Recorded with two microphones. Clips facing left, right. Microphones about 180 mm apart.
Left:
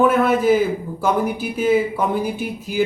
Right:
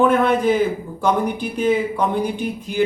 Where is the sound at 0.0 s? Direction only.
5° left (ahead or behind).